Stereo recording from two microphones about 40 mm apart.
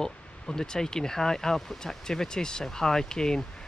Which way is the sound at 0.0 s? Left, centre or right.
Centre.